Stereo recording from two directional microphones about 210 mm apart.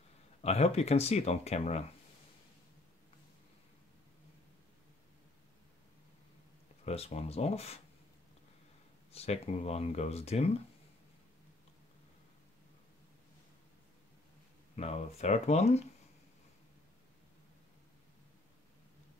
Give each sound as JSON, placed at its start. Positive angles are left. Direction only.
{"t": 0.4, "sound": "speech", "side_deg": 30}
{"t": 6.8, "sound": "speech", "side_deg": 30}
{"t": 9.1, "sound": "speech", "side_deg": 30}
{"t": 14.8, "sound": "speech", "side_deg": 30}